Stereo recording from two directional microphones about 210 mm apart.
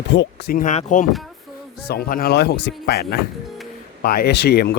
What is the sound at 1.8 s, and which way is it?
Speech, 45° left (ahead or behind).